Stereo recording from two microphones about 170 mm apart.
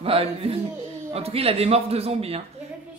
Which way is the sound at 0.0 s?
35° right (ahead or behind).